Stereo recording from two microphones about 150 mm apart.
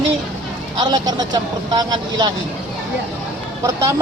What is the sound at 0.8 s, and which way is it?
Speech, 30° right (ahead or behind).